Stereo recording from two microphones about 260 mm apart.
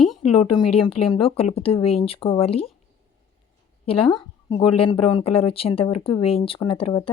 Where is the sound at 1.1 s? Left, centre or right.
Left.